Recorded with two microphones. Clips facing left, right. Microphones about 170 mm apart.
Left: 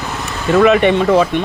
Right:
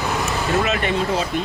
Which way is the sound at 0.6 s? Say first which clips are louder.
Left 10 dB; 65° left (ahead or behind).